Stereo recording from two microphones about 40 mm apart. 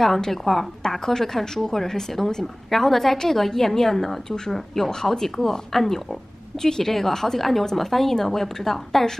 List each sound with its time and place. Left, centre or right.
0.0 s a woman's voice: centre